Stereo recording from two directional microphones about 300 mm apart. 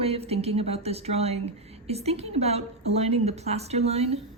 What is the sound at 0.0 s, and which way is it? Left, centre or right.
Speech, centre.